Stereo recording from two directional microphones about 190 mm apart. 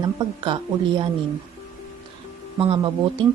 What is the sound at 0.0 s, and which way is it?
Speech, 25° right (ahead or behind).